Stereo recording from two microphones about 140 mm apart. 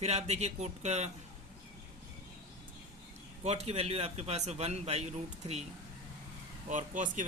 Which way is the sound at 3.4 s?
50° right (ahead or behind).